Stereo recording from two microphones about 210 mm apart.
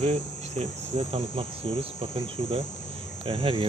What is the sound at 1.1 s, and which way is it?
Speech, 25° right (ahead or behind).